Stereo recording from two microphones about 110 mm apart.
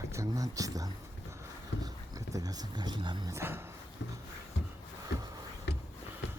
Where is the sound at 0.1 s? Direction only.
30° right (ahead or behind).